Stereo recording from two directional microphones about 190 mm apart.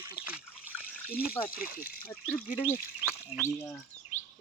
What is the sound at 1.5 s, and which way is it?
Speech, 50° left (ahead or behind).